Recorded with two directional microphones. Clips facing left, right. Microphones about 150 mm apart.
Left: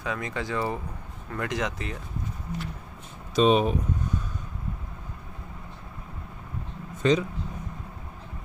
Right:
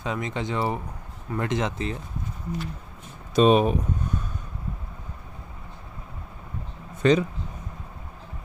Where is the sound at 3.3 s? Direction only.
50° right (ahead or behind).